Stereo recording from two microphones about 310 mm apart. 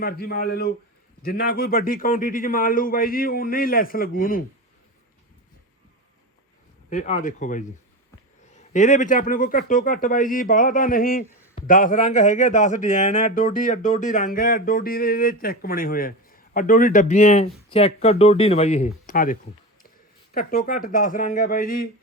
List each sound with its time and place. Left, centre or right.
0.0 s speech: left
6.9 s speech: left